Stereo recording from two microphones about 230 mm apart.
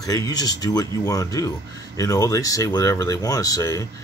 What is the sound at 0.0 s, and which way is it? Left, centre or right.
Speech, centre.